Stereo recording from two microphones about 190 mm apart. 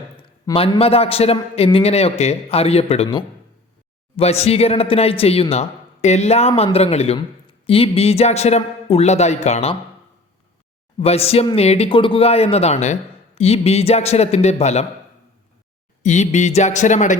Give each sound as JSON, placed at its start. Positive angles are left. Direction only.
{"t": 0.2, "sound": "speech", "side_deg": 25}
{"t": 11.0, "sound": "speech", "side_deg": 30}
{"t": 16.0, "sound": "speech", "side_deg": 40}